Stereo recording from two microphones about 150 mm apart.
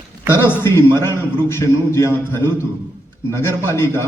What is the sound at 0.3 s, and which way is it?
A man's voice, 15° left (ahead or behind).